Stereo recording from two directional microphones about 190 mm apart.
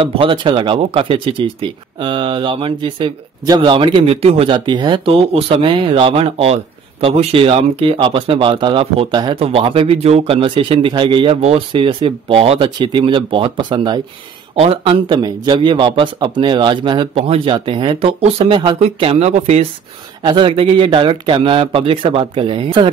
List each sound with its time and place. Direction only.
0.0 s speech: 25° right (ahead or behind)